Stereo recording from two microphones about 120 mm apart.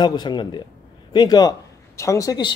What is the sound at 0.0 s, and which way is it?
A man's voice, 35° left (ahead or behind).